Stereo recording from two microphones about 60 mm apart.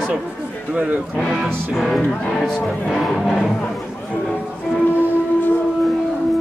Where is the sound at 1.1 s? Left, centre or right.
Centre.